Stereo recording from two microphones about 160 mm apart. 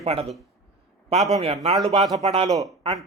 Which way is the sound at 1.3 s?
40° right (ahead or behind).